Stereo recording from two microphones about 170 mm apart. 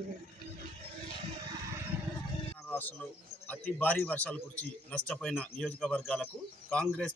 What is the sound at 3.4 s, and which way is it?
A man's voice, 10° left (ahead or behind).